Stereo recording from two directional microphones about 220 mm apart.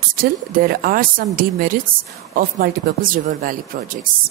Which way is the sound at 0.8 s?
40° right (ahead or behind).